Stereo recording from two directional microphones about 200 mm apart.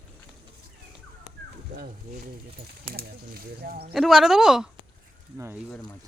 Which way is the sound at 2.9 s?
50° right (ahead or behind).